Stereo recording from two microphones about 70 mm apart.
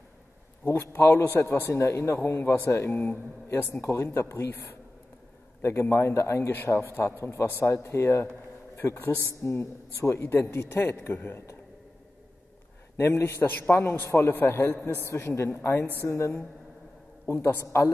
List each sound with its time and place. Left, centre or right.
0.7 s a man's voice: left
3.9 s a man's voice: left
12.9 s a man's voice: left
14.0 s a woman's voice: left
14.3 s a man's voice: left